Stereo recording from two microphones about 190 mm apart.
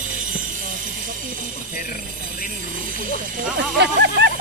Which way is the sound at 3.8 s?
65° right (ahead or behind).